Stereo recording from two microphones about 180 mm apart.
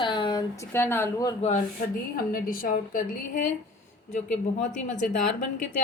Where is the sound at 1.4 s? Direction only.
40° left (ahead or behind).